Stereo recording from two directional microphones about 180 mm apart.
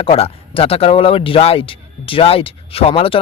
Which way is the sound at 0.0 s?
30° left (ahead or behind).